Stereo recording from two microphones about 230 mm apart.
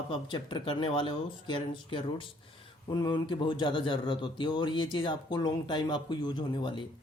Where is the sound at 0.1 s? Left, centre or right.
Left.